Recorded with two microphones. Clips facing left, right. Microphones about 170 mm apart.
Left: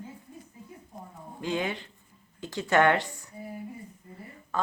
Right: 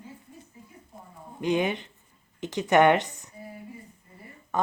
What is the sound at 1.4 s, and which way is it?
A woman's voice, 20° right (ahead or behind).